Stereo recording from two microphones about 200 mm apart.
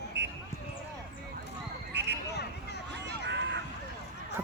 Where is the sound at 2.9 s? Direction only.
60° right (ahead or behind).